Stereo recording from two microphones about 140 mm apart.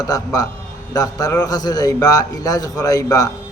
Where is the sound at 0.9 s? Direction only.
25° left (ahead or behind).